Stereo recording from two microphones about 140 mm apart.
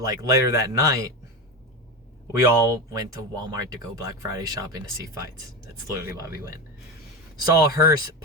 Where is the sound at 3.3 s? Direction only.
25° right (ahead or behind).